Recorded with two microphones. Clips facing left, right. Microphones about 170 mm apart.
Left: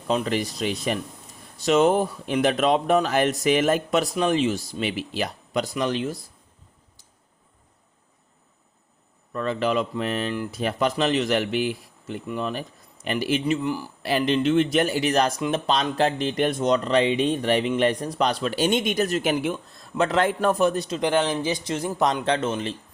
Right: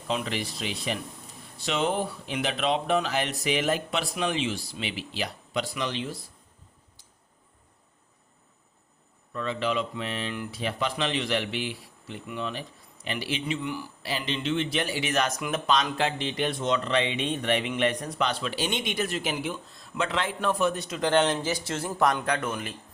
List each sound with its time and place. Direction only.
0.1 s speech: 40° left (ahead or behind)
9.3 s speech: 50° left (ahead or behind)
14.0 s speech: 55° left (ahead or behind)
20.0 s speech: 45° left (ahead or behind)
21.2 s speech: centre (ahead or behind)
21.4 s speech: 15° left (ahead or behind)